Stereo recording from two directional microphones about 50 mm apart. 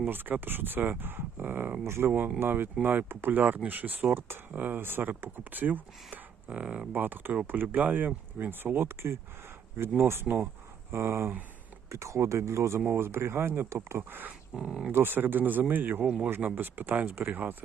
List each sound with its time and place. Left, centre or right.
0.1 s speech: right
1.8 s speech: right
2.0 s speech: right
4.8 s speech: right
6.5 s speech: right
6.9 s speech: right
11.9 s speech: right
12.9 s speech: right
13.5 s speech: right
14.1 s speech: right
14.5 s speech: centre
14.9 s speech: right
16.0 s speech: right
16.6 s speech: right